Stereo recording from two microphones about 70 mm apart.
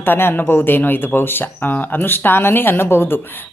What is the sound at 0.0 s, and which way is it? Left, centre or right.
Speech, left.